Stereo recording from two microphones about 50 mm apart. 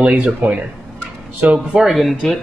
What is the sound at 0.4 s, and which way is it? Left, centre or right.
Speech, right.